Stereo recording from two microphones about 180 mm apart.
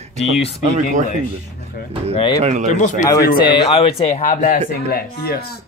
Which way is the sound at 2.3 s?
40° right (ahead or behind).